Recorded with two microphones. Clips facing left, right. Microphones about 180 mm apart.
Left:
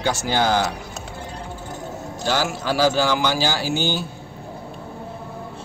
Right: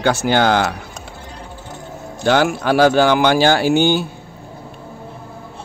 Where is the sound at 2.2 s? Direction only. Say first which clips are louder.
Right 8 dB; 60° right (ahead or behind).